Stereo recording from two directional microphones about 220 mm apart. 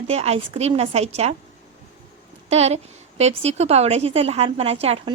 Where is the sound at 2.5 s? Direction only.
30° right (ahead or behind).